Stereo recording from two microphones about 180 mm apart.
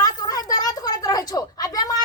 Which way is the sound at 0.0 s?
20° left (ahead or behind).